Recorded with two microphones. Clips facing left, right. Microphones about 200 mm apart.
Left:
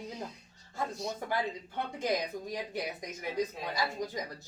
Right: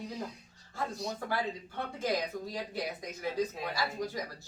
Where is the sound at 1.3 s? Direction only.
20° left (ahead or behind).